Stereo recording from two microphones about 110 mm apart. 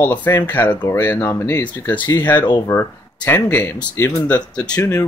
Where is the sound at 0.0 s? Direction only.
20° left (ahead or behind).